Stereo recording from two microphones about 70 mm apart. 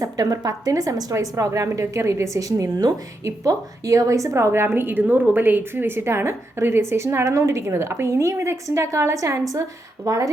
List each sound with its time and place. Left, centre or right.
0.0 s a woman's voice: right
3.2 s a woman's voice: right